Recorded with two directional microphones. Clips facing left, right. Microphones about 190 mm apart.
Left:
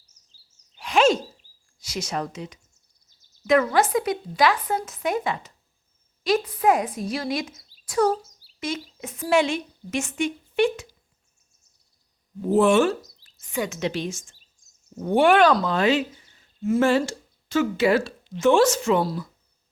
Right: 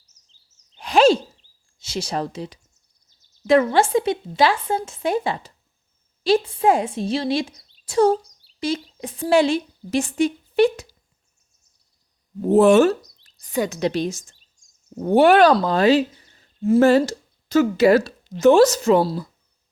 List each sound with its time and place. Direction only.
0.8 s a sound: 35° right (ahead or behind)
1.8 s speech: 30° right (ahead or behind)
8.2 s a sound: 5° left (ahead or behind)
9.0 s a woman's voice: 30° right (ahead or behind)
12.5 s a woman's voice: 40° right (ahead or behind)
13.0 s speech: centre (ahead or behind)
13.4 s a woman's voice: 35° right (ahead or behind)